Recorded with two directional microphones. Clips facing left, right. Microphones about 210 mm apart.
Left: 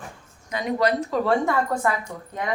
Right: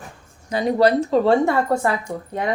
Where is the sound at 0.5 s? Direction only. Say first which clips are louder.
Right 6 dB; 30° right (ahead or behind).